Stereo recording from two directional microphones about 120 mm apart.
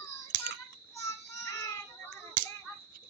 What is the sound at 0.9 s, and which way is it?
Child singing, 25° left (ahead or behind).